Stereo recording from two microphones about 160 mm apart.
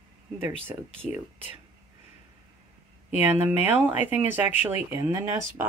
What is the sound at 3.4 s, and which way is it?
Speech, 10° right (ahead or behind).